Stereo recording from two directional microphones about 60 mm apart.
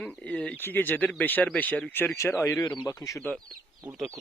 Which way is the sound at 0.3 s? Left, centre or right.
Left.